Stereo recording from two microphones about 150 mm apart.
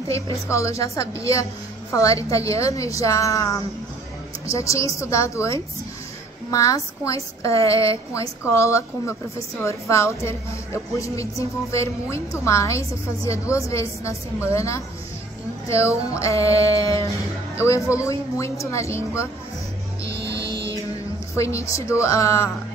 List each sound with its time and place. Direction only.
0.1 s a woman's voice: 20° left (ahead or behind)
21.4 s a woman's voice: 20° left (ahead or behind)